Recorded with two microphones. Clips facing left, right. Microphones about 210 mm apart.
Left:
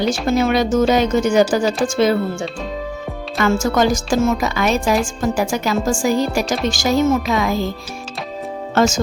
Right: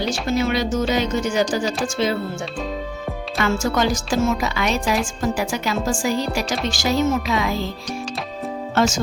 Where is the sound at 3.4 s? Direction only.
45° left (ahead or behind).